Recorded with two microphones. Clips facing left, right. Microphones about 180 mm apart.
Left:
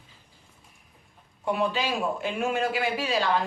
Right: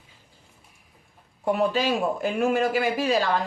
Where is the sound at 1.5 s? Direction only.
45° right (ahead or behind).